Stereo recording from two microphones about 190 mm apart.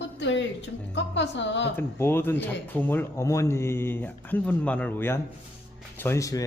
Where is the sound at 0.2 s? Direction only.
75° left (ahead or behind).